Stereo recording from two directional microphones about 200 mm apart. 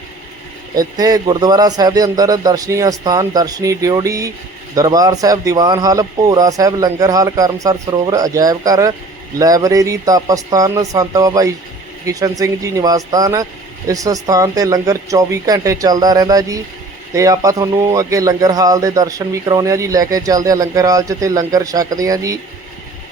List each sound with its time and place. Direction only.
0.8 s a man's voice: 20° right (ahead or behind)